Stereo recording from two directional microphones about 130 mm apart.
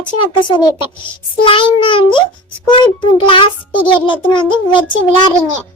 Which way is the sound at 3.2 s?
40° left (ahead or behind).